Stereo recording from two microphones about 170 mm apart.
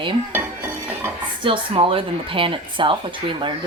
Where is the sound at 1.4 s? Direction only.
30° right (ahead or behind).